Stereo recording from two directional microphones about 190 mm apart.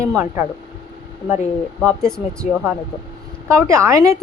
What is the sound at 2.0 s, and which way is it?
Speech, 5° left (ahead or behind).